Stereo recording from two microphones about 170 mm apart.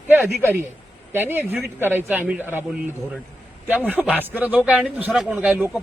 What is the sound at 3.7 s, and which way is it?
Speech, 10° right (ahead or behind).